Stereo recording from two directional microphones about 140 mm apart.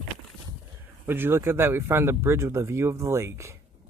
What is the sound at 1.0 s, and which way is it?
Speech, 15° right (ahead or behind).